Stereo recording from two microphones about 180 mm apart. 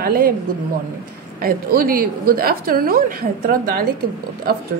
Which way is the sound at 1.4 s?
55° right (ahead or behind).